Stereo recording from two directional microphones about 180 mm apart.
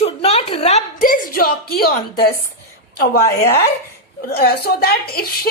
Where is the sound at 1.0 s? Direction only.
50° left (ahead or behind).